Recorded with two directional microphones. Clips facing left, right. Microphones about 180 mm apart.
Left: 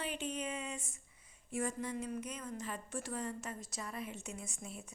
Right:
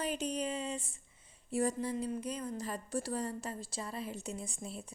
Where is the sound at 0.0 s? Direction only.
40° right (ahead or behind).